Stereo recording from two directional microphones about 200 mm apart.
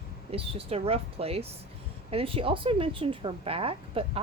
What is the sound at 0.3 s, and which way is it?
Speech, 30° right (ahead or behind).